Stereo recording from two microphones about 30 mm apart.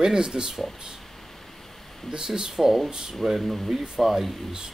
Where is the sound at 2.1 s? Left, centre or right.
Right.